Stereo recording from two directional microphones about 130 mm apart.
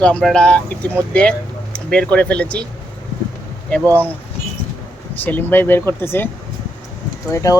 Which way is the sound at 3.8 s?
20° right (ahead or behind).